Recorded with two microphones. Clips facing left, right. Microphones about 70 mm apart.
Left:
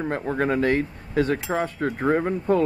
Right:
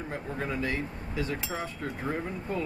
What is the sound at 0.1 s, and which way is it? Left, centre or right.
Speech, left.